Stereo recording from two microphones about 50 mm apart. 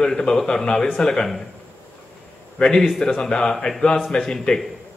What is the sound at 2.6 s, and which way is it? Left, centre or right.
A man's voice, centre.